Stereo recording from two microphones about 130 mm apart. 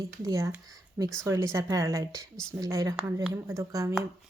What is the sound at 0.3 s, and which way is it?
Speech, 25° right (ahead or behind).